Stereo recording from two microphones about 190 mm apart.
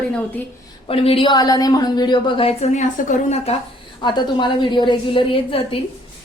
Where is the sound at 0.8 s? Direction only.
30° left (ahead or behind).